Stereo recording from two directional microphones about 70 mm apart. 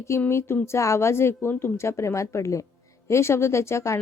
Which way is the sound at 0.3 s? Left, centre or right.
Left.